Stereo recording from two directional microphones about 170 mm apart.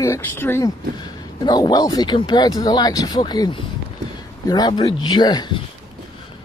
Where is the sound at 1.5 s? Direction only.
25° left (ahead or behind).